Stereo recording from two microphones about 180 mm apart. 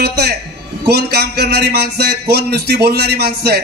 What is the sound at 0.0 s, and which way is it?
A man's voice, 60° right (ahead or behind).